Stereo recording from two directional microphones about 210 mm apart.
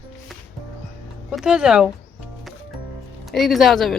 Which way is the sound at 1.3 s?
5° right (ahead or behind).